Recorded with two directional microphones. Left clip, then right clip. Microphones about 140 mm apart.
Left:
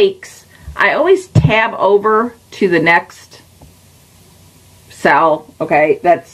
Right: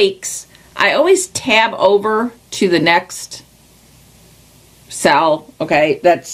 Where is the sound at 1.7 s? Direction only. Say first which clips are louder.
Left 1 dB; 10° right (ahead or behind).